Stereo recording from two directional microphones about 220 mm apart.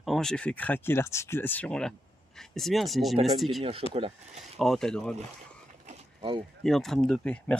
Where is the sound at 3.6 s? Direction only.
25° right (ahead or behind).